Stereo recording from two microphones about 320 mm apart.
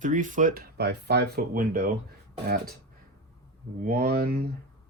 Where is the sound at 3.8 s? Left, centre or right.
Right.